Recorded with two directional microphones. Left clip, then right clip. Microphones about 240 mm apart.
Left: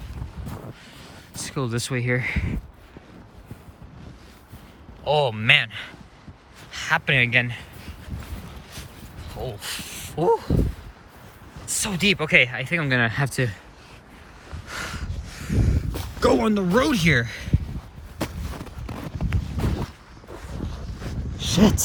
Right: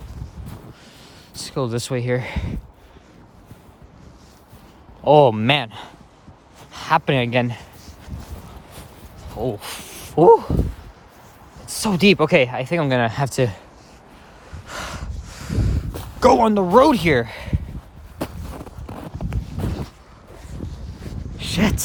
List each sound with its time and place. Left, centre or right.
1.3 s speech: centre
5.0 s speech: right
6.9 s speech: right
9.6 s speech: right
11.7 s speech: right
14.7 s a sound: centre
18.2 s walk: right
21.3 s a sound: centre